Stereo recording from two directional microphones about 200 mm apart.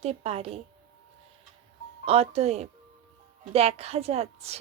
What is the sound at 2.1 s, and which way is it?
A woman's voice, 30° right (ahead or behind).